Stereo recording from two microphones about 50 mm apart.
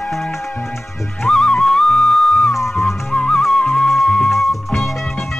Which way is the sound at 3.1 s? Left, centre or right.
Centre.